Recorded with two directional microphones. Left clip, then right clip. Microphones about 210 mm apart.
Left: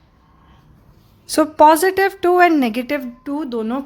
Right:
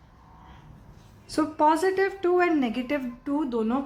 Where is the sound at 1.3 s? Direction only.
55° left (ahead or behind).